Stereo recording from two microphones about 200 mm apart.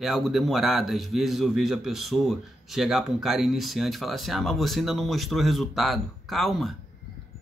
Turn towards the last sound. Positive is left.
turn(degrees=0)  # may be behind; listen again after turning